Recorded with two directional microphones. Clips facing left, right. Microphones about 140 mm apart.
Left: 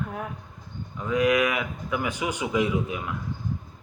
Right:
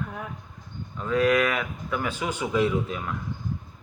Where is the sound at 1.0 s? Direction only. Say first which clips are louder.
Even; 15° left (ahead or behind).